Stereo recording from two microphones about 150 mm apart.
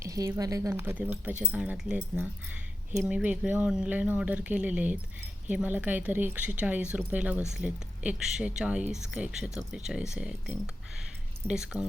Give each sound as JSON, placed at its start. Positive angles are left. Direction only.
{"t": 0.0, "sound": "a woman's voice", "side_deg": -20}